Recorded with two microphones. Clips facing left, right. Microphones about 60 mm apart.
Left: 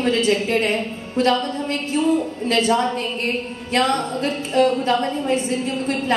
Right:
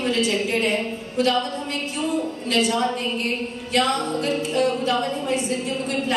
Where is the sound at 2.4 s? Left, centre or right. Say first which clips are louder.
Left 3 dB; left.